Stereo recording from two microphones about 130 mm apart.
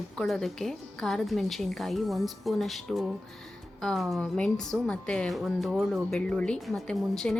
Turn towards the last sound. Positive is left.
turn(degrees=5)  # may be behind; listen again after turning